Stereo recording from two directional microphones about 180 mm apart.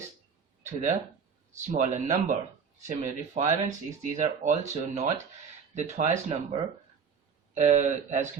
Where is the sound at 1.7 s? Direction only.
45° right (ahead or behind).